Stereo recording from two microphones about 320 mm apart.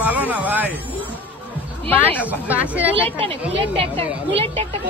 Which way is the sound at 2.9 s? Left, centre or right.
Centre.